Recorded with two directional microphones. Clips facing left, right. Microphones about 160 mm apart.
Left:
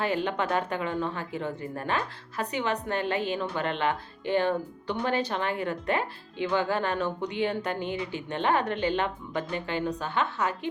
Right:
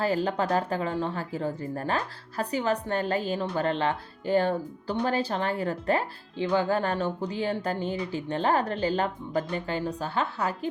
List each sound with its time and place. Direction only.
0.0 s speech: 35° right (ahead or behind)